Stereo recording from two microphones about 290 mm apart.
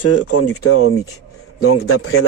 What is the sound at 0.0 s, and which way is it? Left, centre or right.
Speech, left.